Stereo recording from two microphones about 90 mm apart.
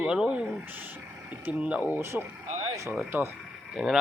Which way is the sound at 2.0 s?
30° right (ahead or behind).